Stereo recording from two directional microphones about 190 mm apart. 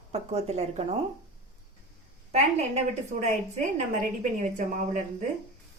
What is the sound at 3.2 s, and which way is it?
A woman's voice, 40° right (ahead or behind).